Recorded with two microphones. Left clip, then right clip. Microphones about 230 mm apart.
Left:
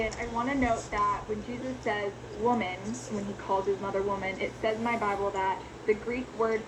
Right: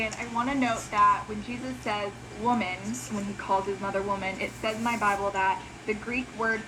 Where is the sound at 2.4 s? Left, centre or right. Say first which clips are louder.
Right 1 dB; right.